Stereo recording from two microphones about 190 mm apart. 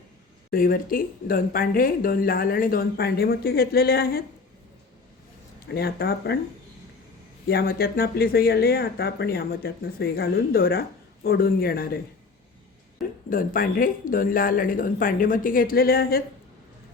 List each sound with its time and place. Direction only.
0.5 s speech: 50° left (ahead or behind)
5.6 s speech: 55° left (ahead or behind)
7.4 s speech: 55° left (ahead or behind)
13.3 s speech: 45° left (ahead or behind)